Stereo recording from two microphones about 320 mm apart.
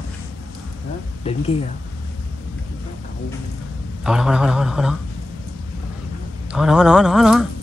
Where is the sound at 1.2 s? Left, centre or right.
Centre.